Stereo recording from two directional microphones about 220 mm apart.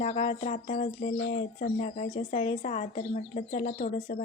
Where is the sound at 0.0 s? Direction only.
25° left (ahead or behind).